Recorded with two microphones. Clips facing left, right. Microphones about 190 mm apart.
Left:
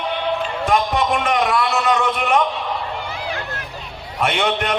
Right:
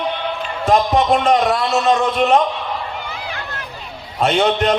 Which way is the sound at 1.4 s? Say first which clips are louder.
Right 2 dB; 45° right (ahead or behind).